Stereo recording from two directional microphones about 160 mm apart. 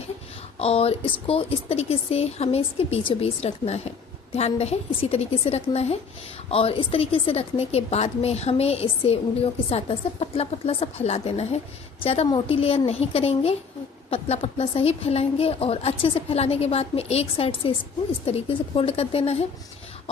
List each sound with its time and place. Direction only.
0.6 s a woman's voice: 40° left (ahead or behind)